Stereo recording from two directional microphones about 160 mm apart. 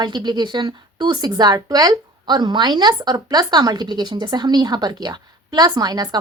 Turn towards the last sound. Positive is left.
turn(degrees=-25)  # may be behind; listen again after turning